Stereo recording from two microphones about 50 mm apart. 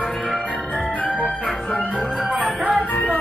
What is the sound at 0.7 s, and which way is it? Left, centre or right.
Music, left.